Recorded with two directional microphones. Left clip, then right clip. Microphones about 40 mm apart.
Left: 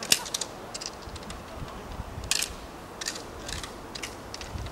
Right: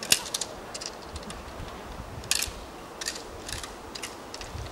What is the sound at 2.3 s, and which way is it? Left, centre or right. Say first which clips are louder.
Camera: even; centre.